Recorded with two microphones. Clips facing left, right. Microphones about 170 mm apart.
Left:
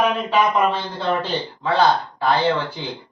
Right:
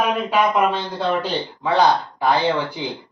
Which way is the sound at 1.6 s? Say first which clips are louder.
Right 1 dB; 15° right (ahead or behind).